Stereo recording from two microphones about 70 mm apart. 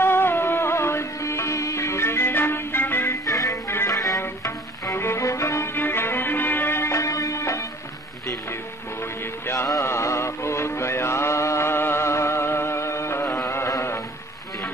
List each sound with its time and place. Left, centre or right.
0.0 s music: left
3.3 s music: left
3.6 s music: left
3.9 s music: left
4.2 s music: left
5.8 s music: left
7.0 s music: left
9.8 s music: left